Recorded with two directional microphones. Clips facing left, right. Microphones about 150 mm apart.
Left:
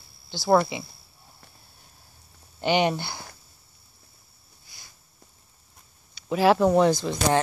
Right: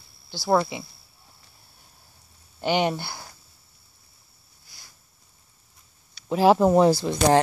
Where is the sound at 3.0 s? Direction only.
5° right (ahead or behind).